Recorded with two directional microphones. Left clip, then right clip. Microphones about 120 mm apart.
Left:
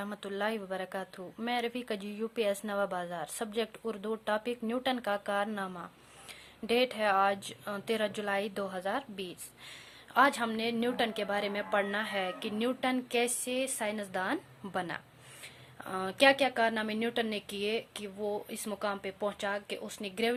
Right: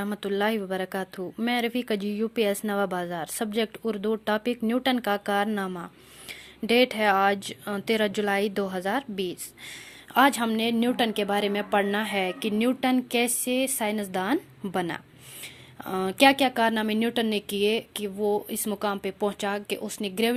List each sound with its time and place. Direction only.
0.0 s a woman's voice: 30° right (ahead or behind)